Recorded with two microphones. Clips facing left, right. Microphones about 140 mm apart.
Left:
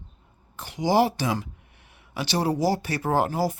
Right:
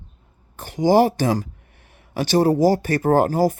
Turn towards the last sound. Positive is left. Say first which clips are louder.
# right 7 dB
turn(degrees=-45)  # may be behind; listen again after turning